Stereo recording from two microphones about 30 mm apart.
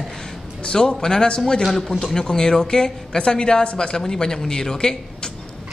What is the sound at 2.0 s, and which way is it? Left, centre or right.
Speech, centre.